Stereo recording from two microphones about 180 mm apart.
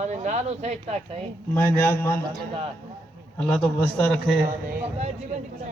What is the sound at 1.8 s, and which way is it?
Speech, 10° left (ahead or behind).